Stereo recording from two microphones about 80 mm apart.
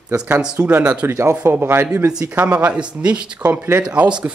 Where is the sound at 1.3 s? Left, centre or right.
Right.